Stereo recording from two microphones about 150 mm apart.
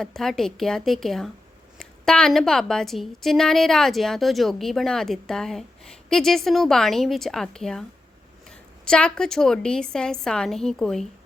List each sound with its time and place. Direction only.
0.0 s a woman's voice: centre (ahead or behind)